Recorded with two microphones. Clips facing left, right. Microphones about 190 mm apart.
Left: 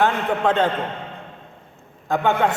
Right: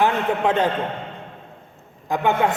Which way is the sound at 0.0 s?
15° right (ahead or behind).